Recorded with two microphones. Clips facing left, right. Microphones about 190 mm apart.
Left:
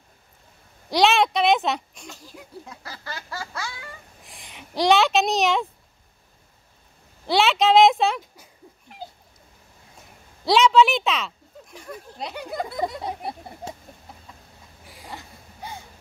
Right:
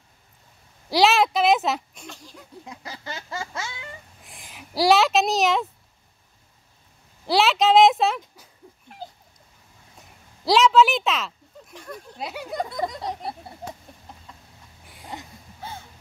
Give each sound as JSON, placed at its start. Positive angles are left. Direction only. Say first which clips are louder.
{"t": 0.8, "sound": "speech", "louder": "even", "side_deg": 0}
{"t": 2.6, "sound": "a sound", "louder": "right 2 dB", "side_deg": -20}
{"t": 4.3, "sound": "speech", "louder": "even", "side_deg": 0}
{"t": 7.2, "sound": "speech", "louder": "even", "side_deg": 0}
{"t": 10.4, "sound": "speech", "louder": "even", "side_deg": 0}
{"t": 12.2, "sound": "speech", "louder": "right 1 dB", "side_deg": -5}
{"t": 15.6, "sound": "a sound", "louder": "even", "side_deg": 15}